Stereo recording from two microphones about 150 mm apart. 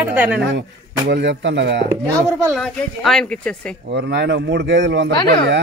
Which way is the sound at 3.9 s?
90° right.